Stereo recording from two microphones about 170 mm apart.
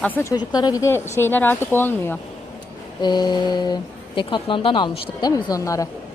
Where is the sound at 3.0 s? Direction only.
25° left (ahead or behind).